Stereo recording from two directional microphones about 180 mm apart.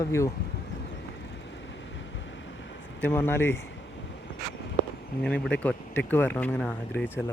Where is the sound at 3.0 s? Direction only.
10° left (ahead or behind).